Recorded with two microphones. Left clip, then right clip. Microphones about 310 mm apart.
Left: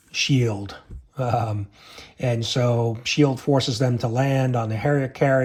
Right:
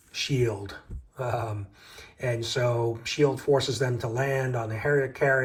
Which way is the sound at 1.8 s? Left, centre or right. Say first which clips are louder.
Left 4 dB; centre.